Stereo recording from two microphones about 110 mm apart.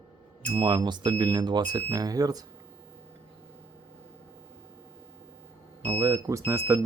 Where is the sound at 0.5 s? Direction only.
40° right (ahead or behind).